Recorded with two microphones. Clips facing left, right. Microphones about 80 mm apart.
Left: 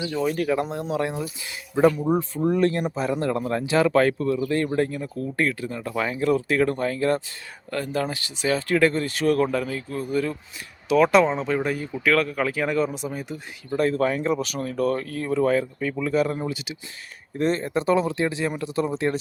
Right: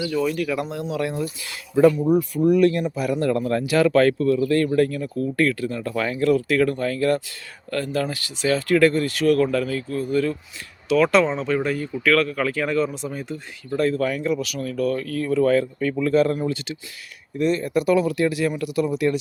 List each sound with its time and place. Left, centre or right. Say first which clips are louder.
0.0 s speech: right 1 dB; left; by 16.7 s centre
17.3 s speech: right 2 dB; left